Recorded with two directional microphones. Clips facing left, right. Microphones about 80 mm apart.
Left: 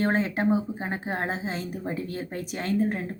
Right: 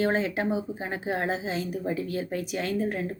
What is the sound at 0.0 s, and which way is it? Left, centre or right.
Speech, left.